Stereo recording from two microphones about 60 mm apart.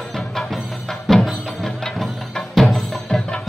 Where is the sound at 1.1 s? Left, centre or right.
Centre.